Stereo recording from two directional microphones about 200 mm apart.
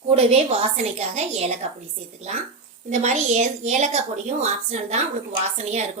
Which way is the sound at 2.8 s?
35° right (ahead or behind).